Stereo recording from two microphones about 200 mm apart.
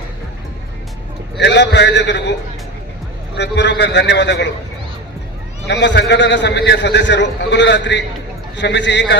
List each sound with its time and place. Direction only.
1.4 s a man's voice: 60° left (ahead or behind)
3.3 s a man's voice: 60° left (ahead or behind)
5.6 s a man's voice: 60° left (ahead or behind)